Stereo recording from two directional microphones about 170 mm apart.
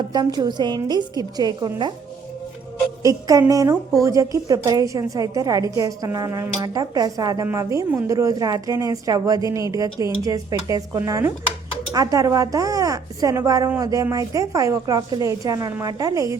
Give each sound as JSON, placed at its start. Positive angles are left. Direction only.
{"t": 0.1, "sound": "a woman's voice", "side_deg": -25}
{"t": 3.0, "sound": "a woman's voice", "side_deg": -20}